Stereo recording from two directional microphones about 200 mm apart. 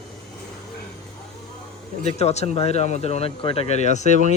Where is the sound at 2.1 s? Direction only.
30° left (ahead or behind).